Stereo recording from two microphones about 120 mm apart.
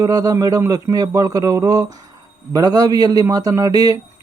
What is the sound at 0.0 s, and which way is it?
Speech, 30° right (ahead or behind).